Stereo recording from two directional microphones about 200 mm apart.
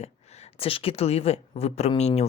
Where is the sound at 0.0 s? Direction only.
35° left (ahead or behind).